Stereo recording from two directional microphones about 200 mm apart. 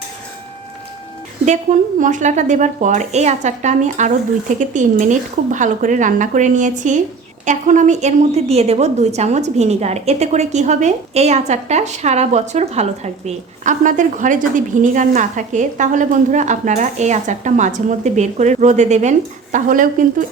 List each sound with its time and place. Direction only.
1.5 s a woman's voice: 40° right (ahead or behind)